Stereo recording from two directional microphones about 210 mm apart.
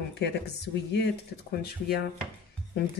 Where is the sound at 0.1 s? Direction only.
55° left (ahead or behind).